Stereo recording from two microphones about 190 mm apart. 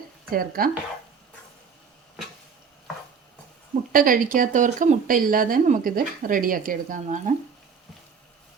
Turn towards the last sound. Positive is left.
turn(degrees=-45)  # may be behind; listen again after turning